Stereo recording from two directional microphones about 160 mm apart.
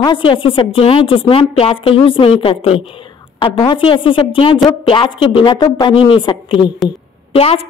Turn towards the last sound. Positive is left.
turn(degrees=35)  # may be behind; listen again after turning